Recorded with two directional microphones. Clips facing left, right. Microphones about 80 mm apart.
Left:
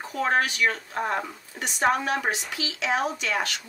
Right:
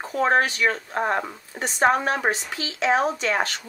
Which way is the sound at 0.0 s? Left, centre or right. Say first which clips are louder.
Right 4 dB; right.